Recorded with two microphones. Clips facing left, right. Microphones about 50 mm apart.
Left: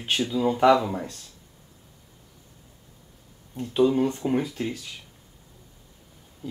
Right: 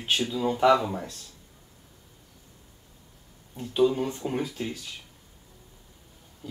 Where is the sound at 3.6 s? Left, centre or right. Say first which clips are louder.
Left 2 dB; centre.